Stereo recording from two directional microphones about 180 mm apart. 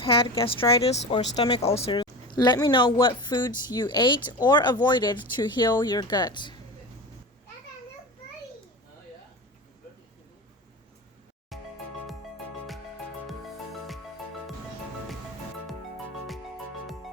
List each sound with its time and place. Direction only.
0.0 s a woman's voice: 30° left (ahead or behind)
11.5 s music: centre (ahead or behind)